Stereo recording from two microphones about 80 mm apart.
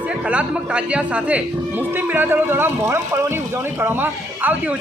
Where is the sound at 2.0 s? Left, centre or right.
Right.